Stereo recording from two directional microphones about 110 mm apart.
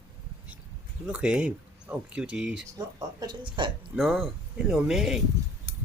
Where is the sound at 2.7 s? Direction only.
35° right (ahead or behind).